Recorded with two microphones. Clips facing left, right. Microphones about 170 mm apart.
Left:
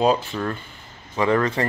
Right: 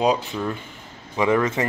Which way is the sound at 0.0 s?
10° right (ahead or behind).